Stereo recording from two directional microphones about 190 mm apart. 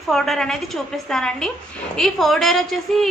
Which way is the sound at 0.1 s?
Centre (ahead or behind).